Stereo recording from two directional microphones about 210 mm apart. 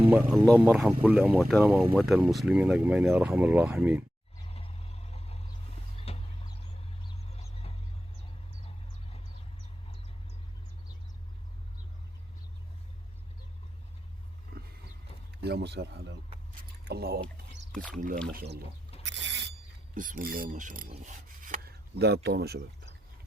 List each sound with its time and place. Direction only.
0.1 s speech: 10° right (ahead or behind)
4.4 s vehicle: 30° left (ahead or behind)
6.1 s a sound: 30° left (ahead or behind)
14.5 s wild animals: 40° right (ahead or behind)
15.4 s speech: 50° right (ahead or behind)
17.7 s speech: 5° left (ahead or behind)
18.3 s speech: 50° right (ahead or behind)
19.0 s mechanisms: 60° right (ahead or behind)
19.9 s mechanisms: 40° right (ahead or behind)